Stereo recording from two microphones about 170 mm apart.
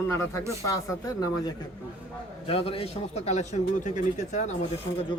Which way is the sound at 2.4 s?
35° left (ahead or behind).